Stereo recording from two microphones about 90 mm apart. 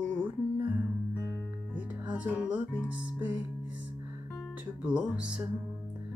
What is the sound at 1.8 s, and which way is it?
Music, 15° right (ahead or behind).